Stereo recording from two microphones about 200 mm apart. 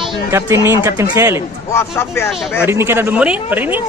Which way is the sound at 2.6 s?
10° right (ahead or behind).